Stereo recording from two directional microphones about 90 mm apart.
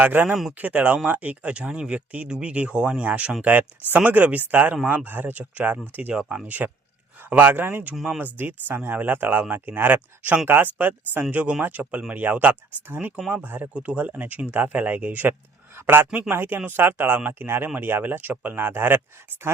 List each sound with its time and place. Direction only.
0.0 s speech: 20° right (ahead or behind)